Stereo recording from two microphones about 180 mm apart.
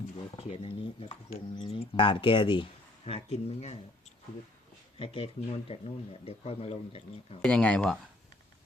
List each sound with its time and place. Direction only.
0.3 s speech: 30° left (ahead or behind)
4.9 s speech: 30° left (ahead or behind)
7.4 s speech: 5° left (ahead or behind)